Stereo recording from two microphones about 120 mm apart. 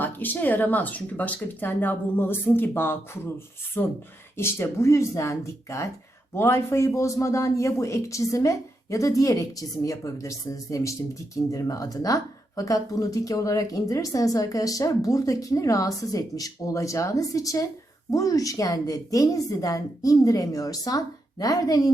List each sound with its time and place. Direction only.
0.0 s a man's voice: 15° left (ahead or behind); by 21.9 s 30° left (ahead or behind)